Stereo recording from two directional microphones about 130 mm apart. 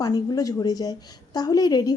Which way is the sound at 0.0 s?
30° left (ahead or behind).